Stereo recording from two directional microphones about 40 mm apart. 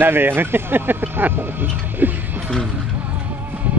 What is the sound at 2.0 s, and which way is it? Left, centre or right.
Mechanisms, right.